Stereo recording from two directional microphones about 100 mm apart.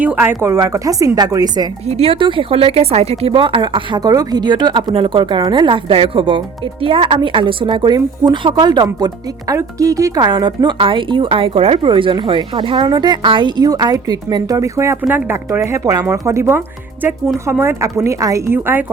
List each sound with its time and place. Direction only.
0.0 s a woman's voice: 20° right (ahead or behind)
0.4 s speech: 30° right (ahead or behind)
1.9 s speech: 75° right (ahead or behind); by 4.0 s 55° right (ahead or behind)
4.0 s speech: 40° right (ahead or behind)
10.3 s a woman's voice: 50° right (ahead or behind); by 18.9 s 20° right (ahead or behind)